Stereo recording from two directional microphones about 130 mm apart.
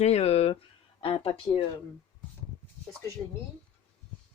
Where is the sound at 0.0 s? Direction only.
55° left (ahead or behind).